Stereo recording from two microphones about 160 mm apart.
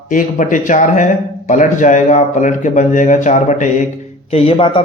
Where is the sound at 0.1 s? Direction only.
55° left (ahead or behind).